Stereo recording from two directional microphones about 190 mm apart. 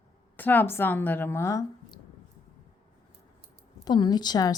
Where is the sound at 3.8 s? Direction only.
20° left (ahead or behind).